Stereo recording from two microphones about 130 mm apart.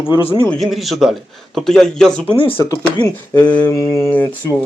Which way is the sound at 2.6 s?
25° left (ahead or behind).